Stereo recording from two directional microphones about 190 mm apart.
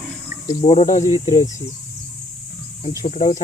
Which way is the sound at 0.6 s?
35° left (ahead or behind).